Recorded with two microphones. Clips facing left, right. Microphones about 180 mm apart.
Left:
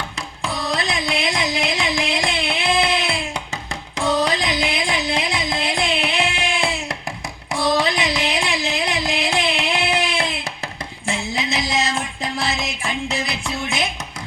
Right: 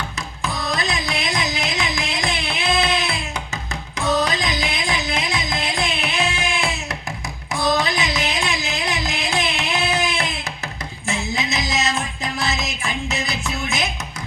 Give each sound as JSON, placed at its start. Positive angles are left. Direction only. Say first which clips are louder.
{"t": 0.2, "sound": "music", "louder": "left 2 dB", "side_deg": 30}
{"t": 4.8, "sound": "carnatic music", "louder": "left 2 dB", "side_deg": 30}
{"t": 11.0, "sound": "music", "louder": "even", "side_deg": 30}